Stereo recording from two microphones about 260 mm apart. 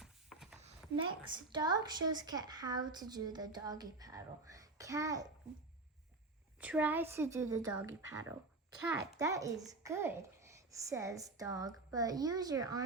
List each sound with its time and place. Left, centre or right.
0.0 s a sound: centre
0.5 s a woman's voice: right
6.6 s a woman's voice: centre